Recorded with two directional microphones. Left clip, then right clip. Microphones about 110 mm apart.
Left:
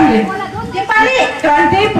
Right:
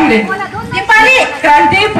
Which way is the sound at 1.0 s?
35° right (ahead or behind).